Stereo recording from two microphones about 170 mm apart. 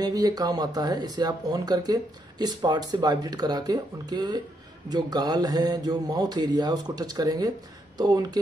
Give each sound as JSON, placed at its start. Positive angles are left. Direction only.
{"t": 0.0, "sound": "speech", "side_deg": -20}